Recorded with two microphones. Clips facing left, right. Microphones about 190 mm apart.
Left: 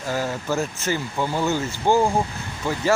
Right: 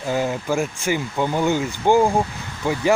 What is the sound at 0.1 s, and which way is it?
Speech, 15° right (ahead or behind).